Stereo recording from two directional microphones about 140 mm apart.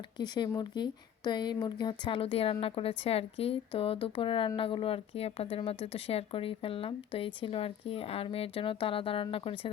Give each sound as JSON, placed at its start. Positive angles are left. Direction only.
{"t": 0.2, "sound": "speech", "side_deg": 30}